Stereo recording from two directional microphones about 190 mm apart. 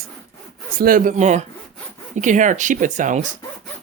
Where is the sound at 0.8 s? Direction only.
45° right (ahead or behind).